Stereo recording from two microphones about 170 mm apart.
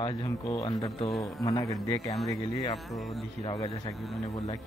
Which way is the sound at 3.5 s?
25° left (ahead or behind).